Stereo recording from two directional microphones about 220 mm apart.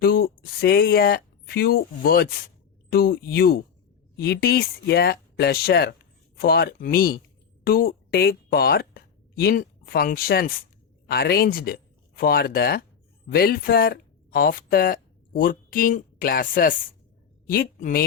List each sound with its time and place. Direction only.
0.0 s a woman's voice: 45° left (ahead or behind)